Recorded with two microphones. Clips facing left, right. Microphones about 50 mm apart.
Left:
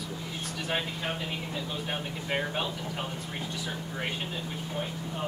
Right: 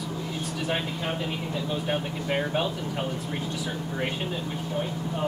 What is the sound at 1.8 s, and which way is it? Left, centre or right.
Speech, centre.